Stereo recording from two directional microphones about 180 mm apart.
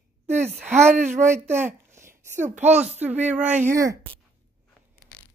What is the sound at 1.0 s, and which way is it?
Speech, 45° right (ahead or behind).